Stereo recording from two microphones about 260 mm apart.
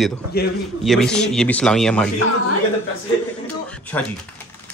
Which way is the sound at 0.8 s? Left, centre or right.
Centre.